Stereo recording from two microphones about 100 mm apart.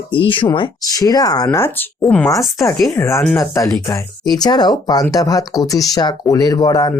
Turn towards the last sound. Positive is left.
turn(degrees=40)  # may be behind; listen again after turning